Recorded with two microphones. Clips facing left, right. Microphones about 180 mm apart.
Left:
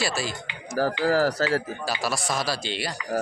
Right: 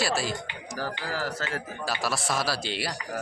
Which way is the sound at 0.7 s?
40° left (ahead or behind).